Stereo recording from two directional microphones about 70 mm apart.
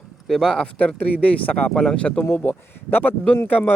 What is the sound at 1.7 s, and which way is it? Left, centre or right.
Speech, centre.